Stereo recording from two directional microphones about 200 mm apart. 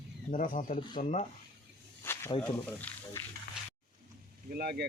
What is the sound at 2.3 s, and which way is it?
Speech, 30° left (ahead or behind).